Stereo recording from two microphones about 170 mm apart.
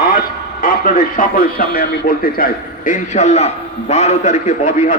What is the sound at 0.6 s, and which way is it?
A man's voice, 55° left (ahead or behind).